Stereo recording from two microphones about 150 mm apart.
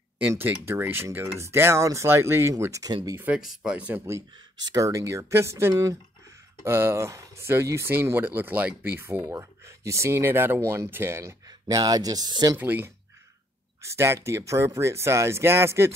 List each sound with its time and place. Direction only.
0.2 s speech: 15° right (ahead or behind)
3.2 s speech: 5° right (ahead or behind); by 12.5 s 25° right (ahead or behind)
12.5 s speech: 10° right (ahead or behind)